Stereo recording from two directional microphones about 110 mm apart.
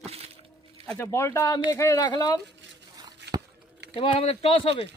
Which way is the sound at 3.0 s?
40° right (ahead or behind).